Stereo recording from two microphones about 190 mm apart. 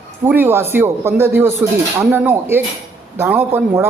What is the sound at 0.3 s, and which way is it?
A man's voice, 10° right (ahead or behind).